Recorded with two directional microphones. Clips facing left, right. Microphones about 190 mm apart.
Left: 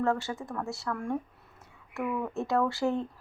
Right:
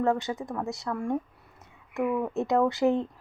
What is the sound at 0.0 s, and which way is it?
Speech, 15° right (ahead or behind).